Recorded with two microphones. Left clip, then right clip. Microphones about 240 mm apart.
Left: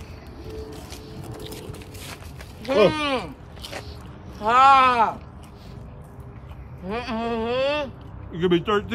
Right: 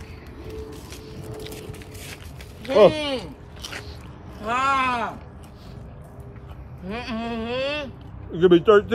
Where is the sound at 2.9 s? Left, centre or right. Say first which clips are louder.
Left 2 dB; centre.